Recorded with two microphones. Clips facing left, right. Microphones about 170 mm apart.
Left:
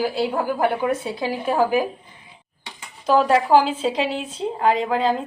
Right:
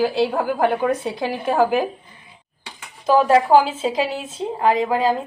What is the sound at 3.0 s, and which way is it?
Speech, 5° right (ahead or behind).